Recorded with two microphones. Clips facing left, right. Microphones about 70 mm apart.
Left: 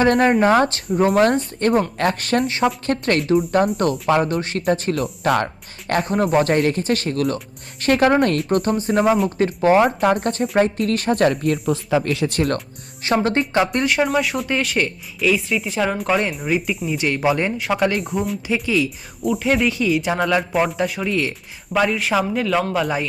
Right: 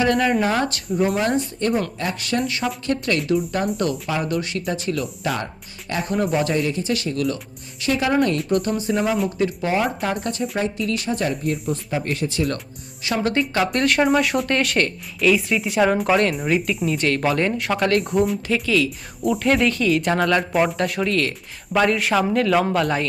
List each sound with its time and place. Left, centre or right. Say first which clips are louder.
0.0 s speech: left 4 dB; left
6.1 s speech: left 3 dB; left
11.7 s speech: left 5 dB; left
12.3 s speech: left 3 dB; left
13.1 s speech: left 3 dB; left
13.7 s speech: right 1 dB; centre
18.5 s speech: left 2 dB; centre
19.2 s speech: even; centre
21.7 s speech: even; centre